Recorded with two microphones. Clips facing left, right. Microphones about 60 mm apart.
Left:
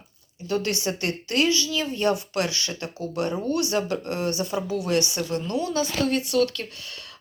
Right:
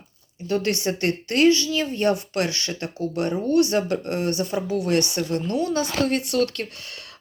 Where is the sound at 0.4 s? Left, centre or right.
Right.